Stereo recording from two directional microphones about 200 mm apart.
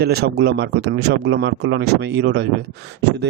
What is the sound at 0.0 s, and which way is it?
Speech, 55° right (ahead or behind).